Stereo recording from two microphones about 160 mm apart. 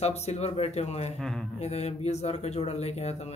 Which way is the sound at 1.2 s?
5° left (ahead or behind).